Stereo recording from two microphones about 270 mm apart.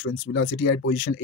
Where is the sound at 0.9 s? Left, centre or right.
Left.